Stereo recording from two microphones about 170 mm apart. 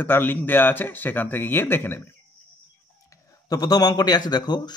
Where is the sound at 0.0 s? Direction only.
10° left (ahead or behind).